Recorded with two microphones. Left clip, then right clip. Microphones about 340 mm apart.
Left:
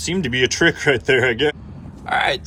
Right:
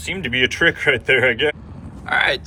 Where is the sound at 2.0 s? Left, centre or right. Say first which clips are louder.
Right 1 dB; centre.